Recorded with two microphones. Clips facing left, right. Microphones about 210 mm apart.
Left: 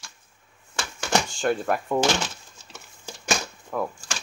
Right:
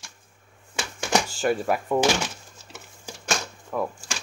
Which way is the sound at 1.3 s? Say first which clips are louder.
Right 1 dB; 5° right (ahead or behind).